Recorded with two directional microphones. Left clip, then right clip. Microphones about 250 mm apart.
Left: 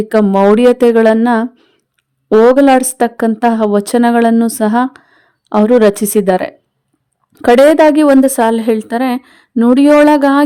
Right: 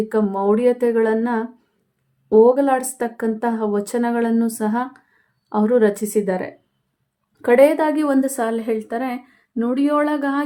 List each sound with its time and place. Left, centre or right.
0.1 s speech: left